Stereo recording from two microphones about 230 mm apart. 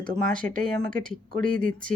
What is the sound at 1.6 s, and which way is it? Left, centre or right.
Speech, right.